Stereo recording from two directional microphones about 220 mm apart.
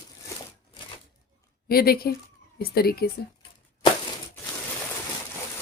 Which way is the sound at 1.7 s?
45° left (ahead or behind).